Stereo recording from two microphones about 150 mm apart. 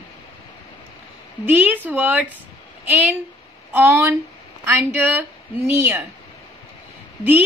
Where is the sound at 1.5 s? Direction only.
10° right (ahead or behind).